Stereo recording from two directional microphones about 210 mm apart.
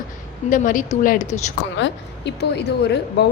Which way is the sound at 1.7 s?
55° left (ahead or behind).